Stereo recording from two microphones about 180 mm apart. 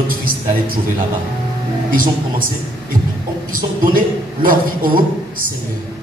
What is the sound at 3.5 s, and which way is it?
A man's voice, 50° right (ahead or behind).